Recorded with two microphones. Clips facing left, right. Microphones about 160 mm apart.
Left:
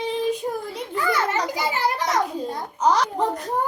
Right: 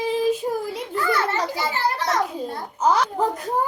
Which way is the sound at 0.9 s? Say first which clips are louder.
Even; 15° left (ahead or behind).